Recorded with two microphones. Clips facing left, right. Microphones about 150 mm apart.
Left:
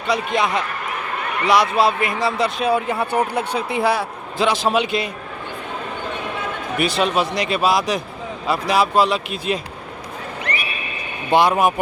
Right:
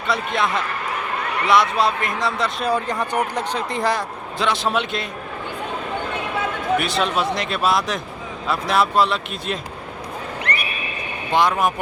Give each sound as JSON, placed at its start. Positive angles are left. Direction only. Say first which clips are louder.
{"t": 0.1, "sound": "a man's voice", "louder": "left 2 dB", "side_deg": 0}
{"t": 1.7, "sound": "a man's voice", "louder": "left 3 dB", "side_deg": 5}
{"t": 6.7, "sound": "a man's voice", "louder": "left 4 dB", "side_deg": 0}
{"t": 10.5, "sound": "horse", "louder": "even", "side_deg": -60}
{"t": 11.3, "sound": "a man's voice", "louder": "left 3 dB", "side_deg": 10}